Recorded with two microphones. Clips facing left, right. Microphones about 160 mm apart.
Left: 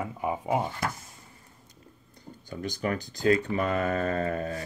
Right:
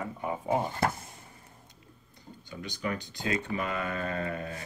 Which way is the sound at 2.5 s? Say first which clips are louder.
Left 4 dB; 45° left (ahead or behind).